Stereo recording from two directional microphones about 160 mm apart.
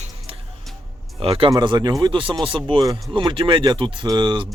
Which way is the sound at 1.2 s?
35° right (ahead or behind).